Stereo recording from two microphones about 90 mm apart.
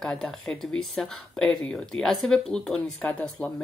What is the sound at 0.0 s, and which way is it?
Speech, 5° left (ahead or behind).